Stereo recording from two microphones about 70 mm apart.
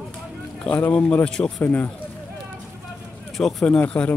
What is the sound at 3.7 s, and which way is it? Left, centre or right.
Speech, centre.